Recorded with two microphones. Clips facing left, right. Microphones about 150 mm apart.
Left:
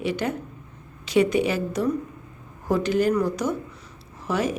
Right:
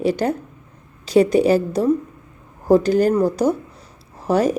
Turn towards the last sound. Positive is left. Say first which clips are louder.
# right 7 dB
turn(degrees=-40)  # may be behind; listen again after turning